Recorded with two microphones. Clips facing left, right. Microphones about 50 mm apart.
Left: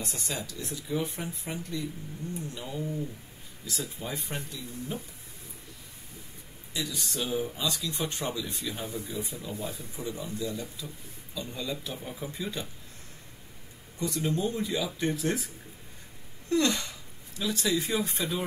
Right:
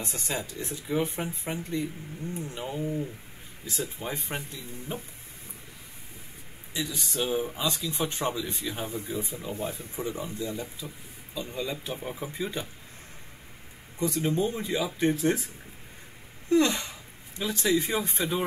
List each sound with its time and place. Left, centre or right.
0.0 s speech: right
6.7 s speech: right
13.9 s speech: right
16.4 s a sound: right
17.4 s speech: right